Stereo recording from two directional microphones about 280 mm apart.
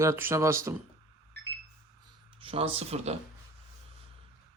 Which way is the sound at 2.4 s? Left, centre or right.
Centre.